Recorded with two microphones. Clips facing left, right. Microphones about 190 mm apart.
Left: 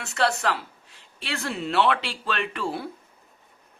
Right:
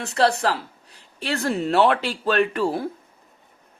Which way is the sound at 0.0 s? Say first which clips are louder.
Right 4 dB; 35° right (ahead or behind).